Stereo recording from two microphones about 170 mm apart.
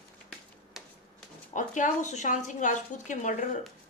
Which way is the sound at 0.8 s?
Centre (ahead or behind).